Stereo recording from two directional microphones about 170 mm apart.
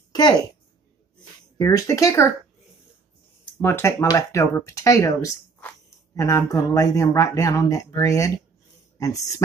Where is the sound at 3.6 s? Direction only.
15° left (ahead or behind).